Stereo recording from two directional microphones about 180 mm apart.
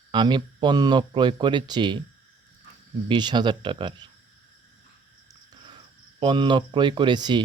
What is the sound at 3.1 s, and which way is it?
Speech, 25° right (ahead or behind).